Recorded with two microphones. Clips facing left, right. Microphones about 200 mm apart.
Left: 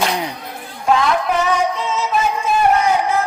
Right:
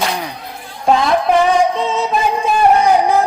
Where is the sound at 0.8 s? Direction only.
35° right (ahead or behind).